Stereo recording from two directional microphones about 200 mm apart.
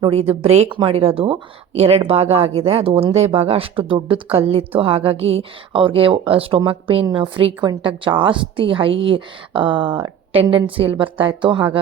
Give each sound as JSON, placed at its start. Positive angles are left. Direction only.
{"t": 0.0, "sound": "a woman's voice", "side_deg": -30}